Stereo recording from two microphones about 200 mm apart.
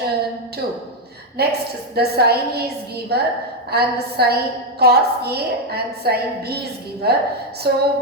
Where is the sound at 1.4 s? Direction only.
50° right (ahead or behind).